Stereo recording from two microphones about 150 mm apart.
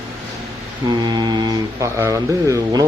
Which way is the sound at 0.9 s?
30° right (ahead or behind).